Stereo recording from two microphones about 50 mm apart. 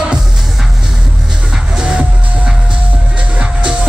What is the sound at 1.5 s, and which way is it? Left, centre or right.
Music, centre.